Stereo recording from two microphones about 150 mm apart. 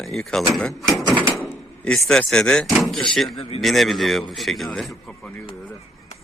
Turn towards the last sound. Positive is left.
turn(degrees=0)  # may be behind; listen again after turning